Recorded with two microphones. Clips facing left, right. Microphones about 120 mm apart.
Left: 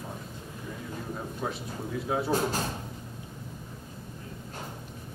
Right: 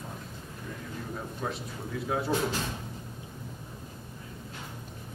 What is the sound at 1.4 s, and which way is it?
Speech, centre (ahead or behind).